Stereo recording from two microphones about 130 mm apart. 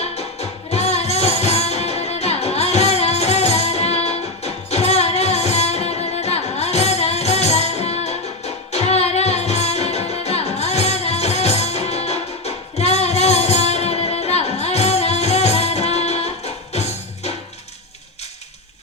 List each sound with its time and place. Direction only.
0.0 s music: 55° left (ahead or behind)